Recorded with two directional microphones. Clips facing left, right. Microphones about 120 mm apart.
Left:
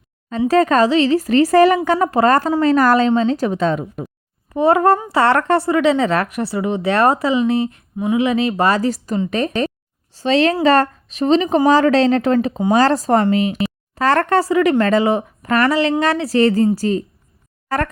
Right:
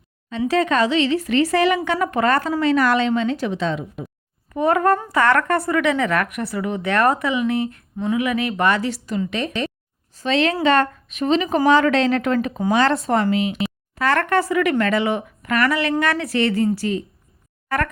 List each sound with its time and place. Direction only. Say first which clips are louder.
0.3 s speech: left 5 dB; 40° left (ahead or behind)
4.5 s speech: left 4 dB; 25° left (ahead or behind)